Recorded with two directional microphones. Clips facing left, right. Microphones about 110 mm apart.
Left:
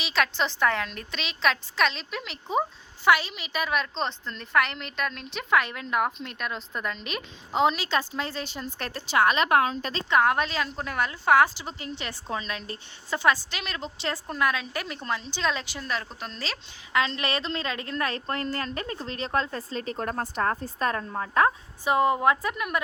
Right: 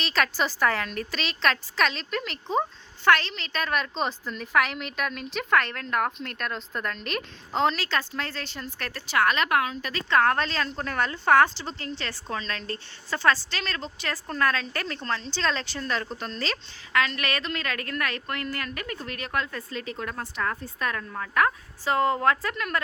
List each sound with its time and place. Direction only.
0.0 s a woman's voice: centre (ahead or behind); by 10.0 s 30° left (ahead or behind)
10.1 s a woman's voice: 15° left (ahead or behind)
16.9 s a woman's voice: 25° left (ahead or behind)